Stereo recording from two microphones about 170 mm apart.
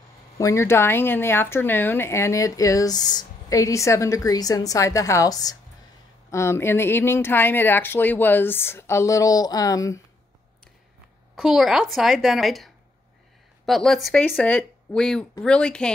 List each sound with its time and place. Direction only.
0.4 s speech: 15° left (ahead or behind)
11.3 s a woman's voice: centre (ahead or behind)